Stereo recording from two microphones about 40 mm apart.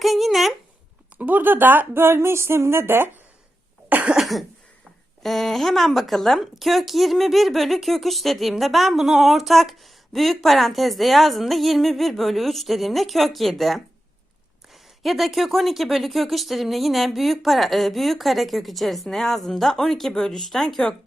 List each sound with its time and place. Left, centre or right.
0.0 s a sound: centre
1.2 s speech: right
1.9 s music: right
3.9 s cough: right
5.2 s speech: centre
15.0 s speech: centre